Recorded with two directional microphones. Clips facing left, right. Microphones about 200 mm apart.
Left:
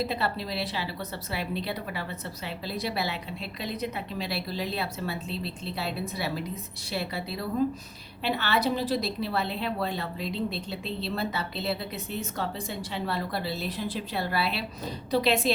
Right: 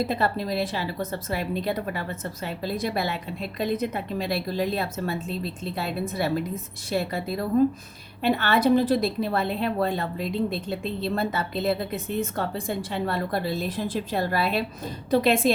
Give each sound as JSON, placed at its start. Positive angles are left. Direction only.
{"t": 0.0, "sound": "a woman's voice", "side_deg": -50}